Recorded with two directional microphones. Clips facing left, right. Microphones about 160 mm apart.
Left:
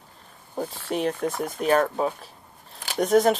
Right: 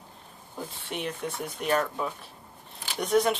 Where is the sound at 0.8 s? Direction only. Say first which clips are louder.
Left 8 dB; 40° left (ahead or behind).